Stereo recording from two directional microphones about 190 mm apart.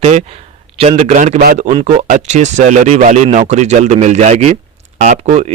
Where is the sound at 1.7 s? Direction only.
35° right (ahead or behind).